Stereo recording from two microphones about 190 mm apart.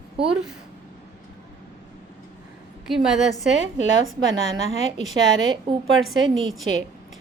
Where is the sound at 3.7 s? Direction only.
75° right (ahead or behind).